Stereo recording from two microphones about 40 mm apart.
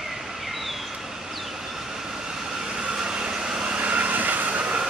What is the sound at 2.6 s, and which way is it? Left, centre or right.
Train, right.